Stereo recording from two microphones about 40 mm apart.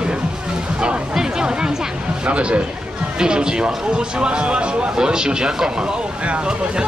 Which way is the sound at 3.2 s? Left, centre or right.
Centre.